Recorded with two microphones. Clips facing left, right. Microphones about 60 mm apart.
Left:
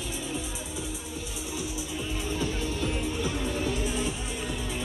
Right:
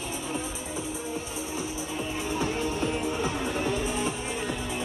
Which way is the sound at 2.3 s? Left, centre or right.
Right.